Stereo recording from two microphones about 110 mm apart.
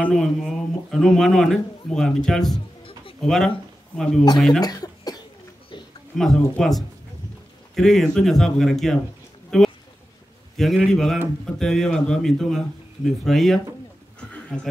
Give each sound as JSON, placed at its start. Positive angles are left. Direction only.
{"t": 0.0, "sound": "speech", "side_deg": 5}
{"t": 4.6, "sound": "speech", "side_deg": 35}
{"t": 6.1, "sound": "speech", "side_deg": 5}
{"t": 10.9, "sound": "speech", "side_deg": 5}
{"t": 14.3, "sound": "a sound", "side_deg": 10}